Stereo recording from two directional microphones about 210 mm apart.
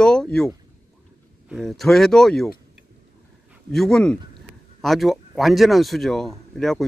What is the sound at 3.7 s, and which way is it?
Speech, 5° left (ahead or behind).